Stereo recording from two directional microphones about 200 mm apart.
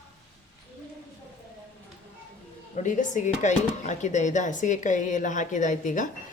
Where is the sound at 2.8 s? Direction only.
40° left (ahead or behind).